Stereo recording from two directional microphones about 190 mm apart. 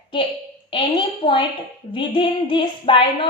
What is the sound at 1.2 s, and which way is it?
A woman's voice, 25° left (ahead or behind).